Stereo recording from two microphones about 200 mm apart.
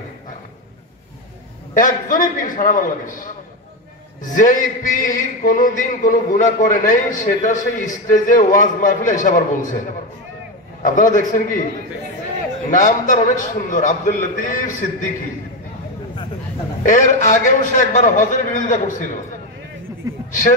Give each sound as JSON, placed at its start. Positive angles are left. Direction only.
{"t": 1.7, "sound": "a man's voice", "side_deg": 40}
{"t": 10.8, "sound": "a man's voice", "side_deg": 40}
{"t": 12.6, "sound": "a man's voice", "side_deg": 40}
{"t": 16.8, "sound": "a man's voice", "side_deg": 40}